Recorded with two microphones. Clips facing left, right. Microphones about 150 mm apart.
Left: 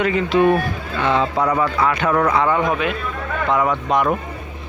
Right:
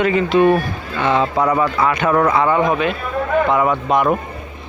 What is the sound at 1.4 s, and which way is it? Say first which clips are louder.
Speech: right 2 dB; 25° right (ahead or behind).